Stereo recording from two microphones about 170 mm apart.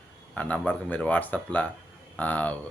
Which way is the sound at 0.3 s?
10° left (ahead or behind).